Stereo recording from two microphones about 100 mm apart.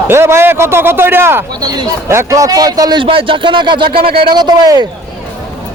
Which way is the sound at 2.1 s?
30° right (ahead or behind).